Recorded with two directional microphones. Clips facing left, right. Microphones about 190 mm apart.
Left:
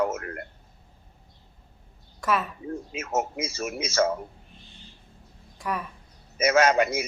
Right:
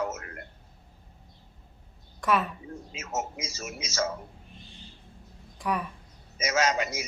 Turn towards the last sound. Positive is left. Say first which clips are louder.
# left 6 dB
turn(degrees=55)  # may be behind; listen again after turning